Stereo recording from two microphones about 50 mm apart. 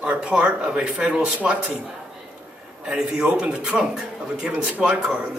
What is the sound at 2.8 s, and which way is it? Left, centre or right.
A man's voice, centre.